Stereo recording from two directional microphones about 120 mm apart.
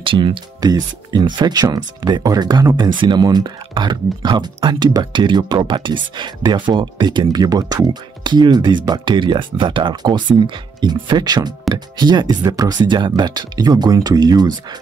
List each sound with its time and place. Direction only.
0.0 s speech: 45° right (ahead or behind)